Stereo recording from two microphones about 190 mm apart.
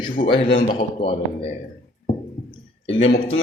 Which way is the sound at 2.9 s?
75° left (ahead or behind).